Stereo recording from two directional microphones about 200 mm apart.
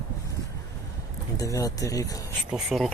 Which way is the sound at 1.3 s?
15° left (ahead or behind).